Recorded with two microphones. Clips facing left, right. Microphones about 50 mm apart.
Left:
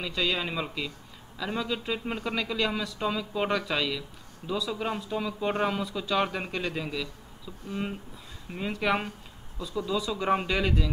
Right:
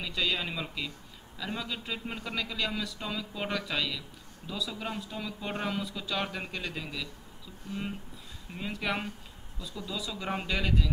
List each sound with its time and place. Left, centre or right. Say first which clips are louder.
0.0 s a man's voice: left 3 dB; centre
8.5 s a man's voice: left 5 dB; centre